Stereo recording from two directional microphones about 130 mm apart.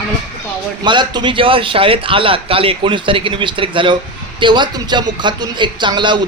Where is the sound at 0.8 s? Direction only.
35° right (ahead or behind).